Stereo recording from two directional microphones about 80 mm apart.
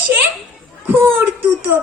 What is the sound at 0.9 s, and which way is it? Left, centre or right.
Synthetic singing, right.